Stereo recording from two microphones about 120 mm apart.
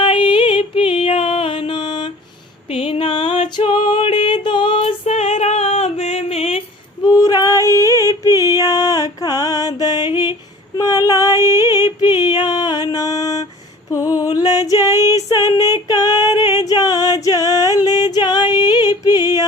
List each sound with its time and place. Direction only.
0.0 s music: 45° left (ahead or behind)
2.6 s a sound: 55° left (ahead or behind)
3.2 s music: 75° left (ahead or behind)
3.6 s music: 40° left (ahead or behind); by 6.6 s 60° left (ahead or behind)
7.0 s female singing: 30° left (ahead or behind)
8.4 s music: 30° left (ahead or behind)
10.8 s female singing: 30° left (ahead or behind)
11.9 s a sound: 20° right (ahead or behind)
12.2 s mantra: 35° left (ahead or behind)
13.9 s music: 30° left (ahead or behind)
15.1 s female singing: 30° left (ahead or behind)
15.6 s music: 30° left (ahead or behind)